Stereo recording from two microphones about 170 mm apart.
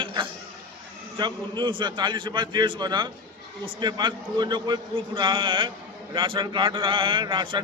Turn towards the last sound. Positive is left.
turn(degrees=-30)  # may be behind; listen again after turning